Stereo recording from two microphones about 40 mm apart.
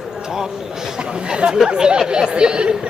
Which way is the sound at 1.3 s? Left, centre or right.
Right.